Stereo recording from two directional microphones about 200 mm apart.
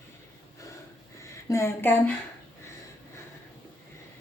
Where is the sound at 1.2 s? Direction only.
15° left (ahead or behind).